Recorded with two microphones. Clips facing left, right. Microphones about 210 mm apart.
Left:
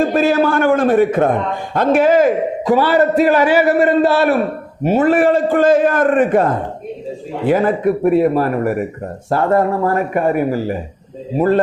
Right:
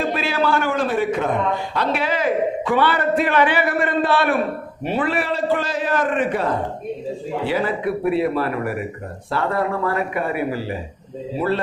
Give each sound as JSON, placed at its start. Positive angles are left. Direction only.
{"t": 0.0, "sound": "a man's voice", "side_deg": 45}